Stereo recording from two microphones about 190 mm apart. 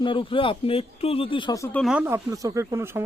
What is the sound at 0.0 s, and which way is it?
Speech, 25° left (ahead or behind).